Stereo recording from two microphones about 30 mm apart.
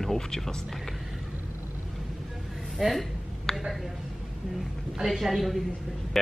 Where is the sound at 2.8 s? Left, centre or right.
Centre.